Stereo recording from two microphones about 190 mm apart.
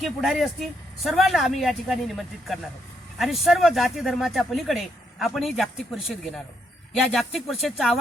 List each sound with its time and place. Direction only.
0.0 s speech: centre (ahead or behind)